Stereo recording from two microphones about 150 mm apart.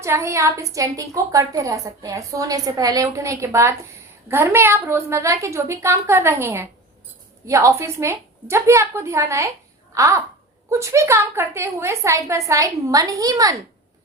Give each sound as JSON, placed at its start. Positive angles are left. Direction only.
{"t": 0.0, "sound": "a woman's voice", "side_deg": -20}
{"t": 9.9, "sound": "babbling", "side_deg": -20}
{"t": 10.7, "sound": "a woman's voice", "side_deg": -20}